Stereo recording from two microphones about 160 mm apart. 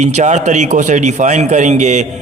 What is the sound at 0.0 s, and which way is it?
A man's voice, 50° right (ahead or behind).